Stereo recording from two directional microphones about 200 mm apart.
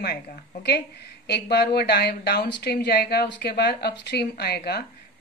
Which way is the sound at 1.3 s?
55° left (ahead or behind).